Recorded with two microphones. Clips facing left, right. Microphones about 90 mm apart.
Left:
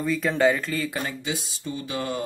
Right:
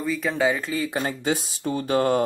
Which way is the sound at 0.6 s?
20° right (ahead or behind).